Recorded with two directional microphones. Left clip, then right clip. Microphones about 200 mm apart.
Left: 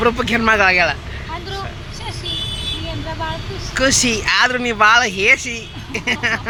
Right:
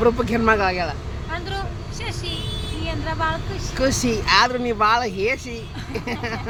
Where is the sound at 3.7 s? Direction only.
Centre (ahead or behind).